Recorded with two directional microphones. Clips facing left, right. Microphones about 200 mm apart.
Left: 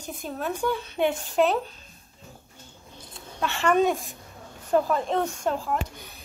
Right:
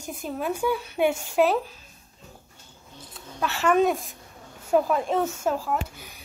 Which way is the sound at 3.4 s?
5° right (ahead or behind).